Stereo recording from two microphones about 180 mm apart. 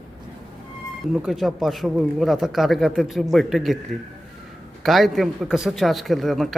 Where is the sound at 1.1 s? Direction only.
Centre (ahead or behind).